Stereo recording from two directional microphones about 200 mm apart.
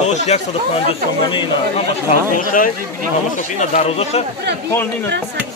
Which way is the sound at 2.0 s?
45° left (ahead or behind).